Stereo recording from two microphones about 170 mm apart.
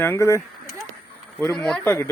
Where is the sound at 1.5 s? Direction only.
5° left (ahead or behind).